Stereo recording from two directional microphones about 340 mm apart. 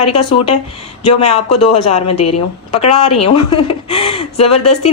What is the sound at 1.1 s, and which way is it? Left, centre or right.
Speech, centre.